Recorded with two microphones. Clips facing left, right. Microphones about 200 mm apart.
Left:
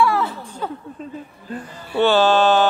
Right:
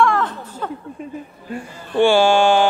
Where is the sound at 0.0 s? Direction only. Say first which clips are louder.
Right 1 dB; 10° left (ahead or behind).